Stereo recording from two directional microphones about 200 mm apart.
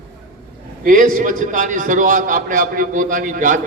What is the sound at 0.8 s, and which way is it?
A man's voice, 45° right (ahead or behind).